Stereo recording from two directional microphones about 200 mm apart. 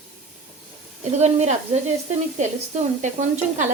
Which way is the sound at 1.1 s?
35° right (ahead or behind).